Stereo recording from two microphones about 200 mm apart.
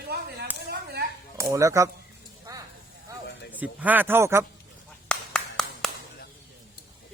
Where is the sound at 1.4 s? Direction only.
15° right (ahead or behind).